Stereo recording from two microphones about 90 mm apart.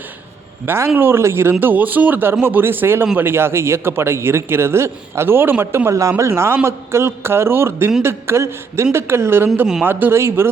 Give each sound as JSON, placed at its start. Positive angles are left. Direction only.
{"t": 0.6, "sound": "a man's voice", "side_deg": -25}